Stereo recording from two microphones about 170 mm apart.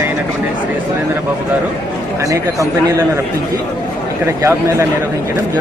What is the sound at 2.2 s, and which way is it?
Speech, 20° right (ahead or behind).